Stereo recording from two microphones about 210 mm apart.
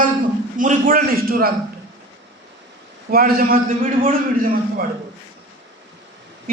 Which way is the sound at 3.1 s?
45° right (ahead or behind).